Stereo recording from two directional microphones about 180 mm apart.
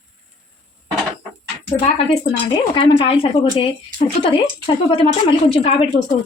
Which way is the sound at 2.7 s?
30° left (ahead or behind).